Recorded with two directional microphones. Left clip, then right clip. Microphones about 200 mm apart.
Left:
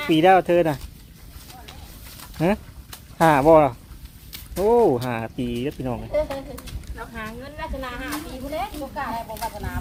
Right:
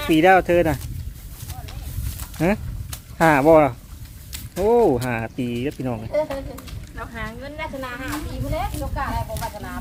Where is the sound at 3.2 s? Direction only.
5° right (ahead or behind).